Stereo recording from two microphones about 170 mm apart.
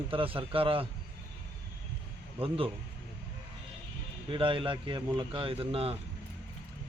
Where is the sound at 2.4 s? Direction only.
35° right (ahead or behind).